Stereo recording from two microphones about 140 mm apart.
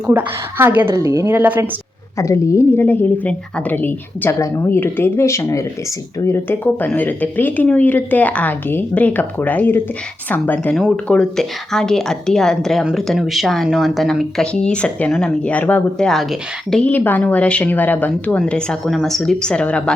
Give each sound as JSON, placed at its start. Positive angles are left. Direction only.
{"t": 0.1, "sound": "a woman's voice", "side_deg": -15}
{"t": 2.1, "sound": "speech", "side_deg": 20}